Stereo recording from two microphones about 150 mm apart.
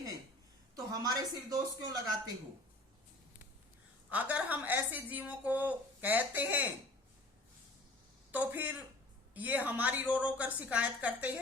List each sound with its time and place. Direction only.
0.9 s speech: 25° right (ahead or behind)
4.1 s a woman's voice: 10° right (ahead or behind)
8.3 s a woman's voice: 10° right (ahead or behind)